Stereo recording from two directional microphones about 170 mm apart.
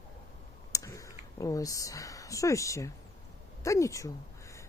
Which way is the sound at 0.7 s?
20° left (ahead or behind).